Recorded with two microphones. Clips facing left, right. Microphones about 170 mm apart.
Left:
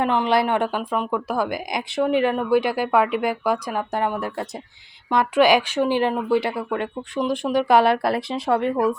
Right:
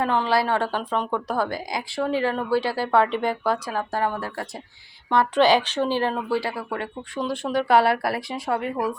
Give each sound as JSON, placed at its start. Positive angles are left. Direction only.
{"t": 0.0, "sound": "a woman's voice", "side_deg": 20}